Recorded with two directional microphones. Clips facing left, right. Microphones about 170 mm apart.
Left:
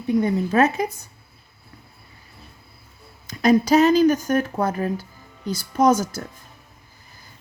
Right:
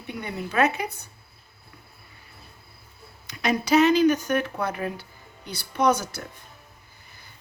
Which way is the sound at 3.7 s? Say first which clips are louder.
Right 1 dB; 35° left (ahead or behind).